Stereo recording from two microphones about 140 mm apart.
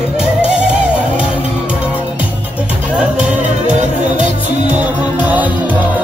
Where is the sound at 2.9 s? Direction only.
10° right (ahead or behind).